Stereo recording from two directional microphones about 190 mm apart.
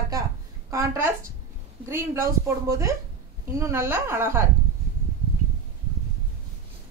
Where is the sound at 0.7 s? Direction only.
15° right (ahead or behind).